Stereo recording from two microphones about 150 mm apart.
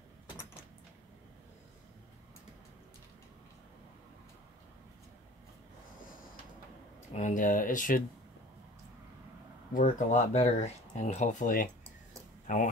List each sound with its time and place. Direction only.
7.2 s speech: 60° left (ahead or behind)
9.8 s speech: 60° left (ahead or behind)